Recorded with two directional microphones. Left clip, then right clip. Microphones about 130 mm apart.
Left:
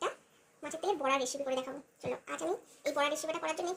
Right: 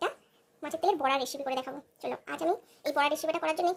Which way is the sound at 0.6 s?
55° right (ahead or behind).